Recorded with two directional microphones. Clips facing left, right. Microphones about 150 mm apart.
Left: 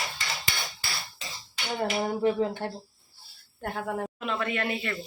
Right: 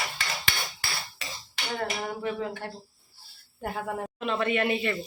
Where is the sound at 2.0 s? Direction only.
30° left (ahead or behind).